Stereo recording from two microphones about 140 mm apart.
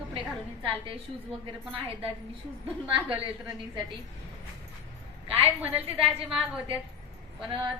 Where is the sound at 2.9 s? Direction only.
35° right (ahead or behind).